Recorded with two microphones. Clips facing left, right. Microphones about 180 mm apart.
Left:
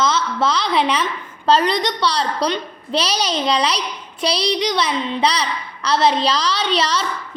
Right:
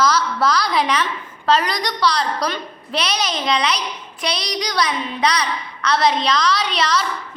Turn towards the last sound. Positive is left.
turn(degrees=30)  # may be behind; listen again after turning